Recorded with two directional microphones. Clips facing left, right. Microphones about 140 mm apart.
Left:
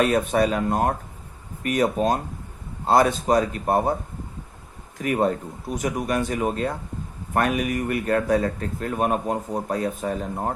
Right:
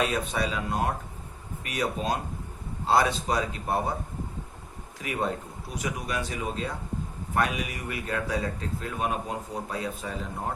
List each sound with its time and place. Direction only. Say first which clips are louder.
0.0 s a man's voice: left 8 dB; 50° left (ahead or behind)
4.9 s a man's voice: left 8 dB; 50° left (ahead or behind)